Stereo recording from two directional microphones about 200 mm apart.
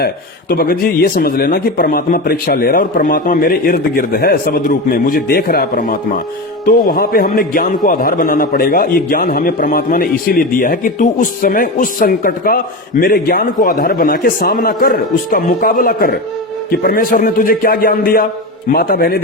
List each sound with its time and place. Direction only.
0.5 s speech: 50° left (ahead or behind)